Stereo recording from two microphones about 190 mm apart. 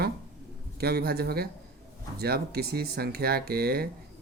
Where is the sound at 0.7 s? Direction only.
55° right (ahead or behind).